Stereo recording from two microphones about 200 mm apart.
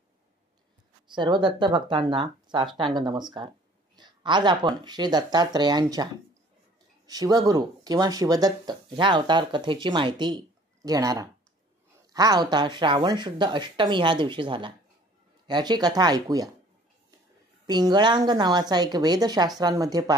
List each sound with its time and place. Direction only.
1.1 s speech: 25° right (ahead or behind)
7.1 s speech: 20° right (ahead or behind)
17.6 s a woman's voice: 20° right (ahead or behind)